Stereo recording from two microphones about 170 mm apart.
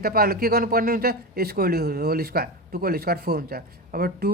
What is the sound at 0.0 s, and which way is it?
A man's voice, 65° right (ahead or behind).